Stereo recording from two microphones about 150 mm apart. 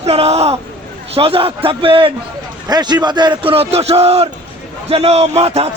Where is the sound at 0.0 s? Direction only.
45° right (ahead or behind).